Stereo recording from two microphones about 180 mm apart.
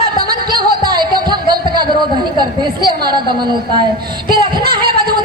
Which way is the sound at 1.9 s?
25° right (ahead or behind).